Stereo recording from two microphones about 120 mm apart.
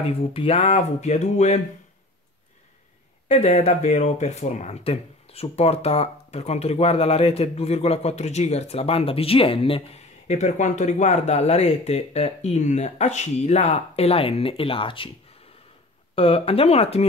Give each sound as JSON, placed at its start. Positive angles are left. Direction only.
{"t": 0.0, "sound": "speech", "side_deg": 55}
{"t": 3.3, "sound": "speech", "side_deg": 60}
{"t": 10.2, "sound": "speech", "side_deg": 85}
{"t": 16.2, "sound": "speech", "side_deg": 50}